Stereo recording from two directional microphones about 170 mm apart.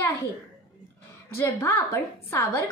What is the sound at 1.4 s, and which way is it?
A woman's voice, 15° left (ahead or behind).